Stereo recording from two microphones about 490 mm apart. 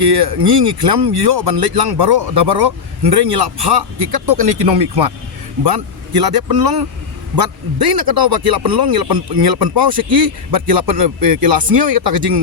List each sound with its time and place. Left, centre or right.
0.0 s speech: right